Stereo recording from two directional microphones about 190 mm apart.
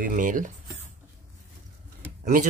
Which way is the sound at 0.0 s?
45° right (ahead or behind).